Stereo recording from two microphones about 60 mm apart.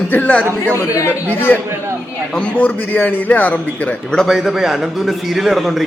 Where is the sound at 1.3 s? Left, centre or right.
Left.